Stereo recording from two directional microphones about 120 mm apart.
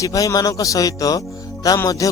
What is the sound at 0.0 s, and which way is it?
Speech, 30° left (ahead or behind).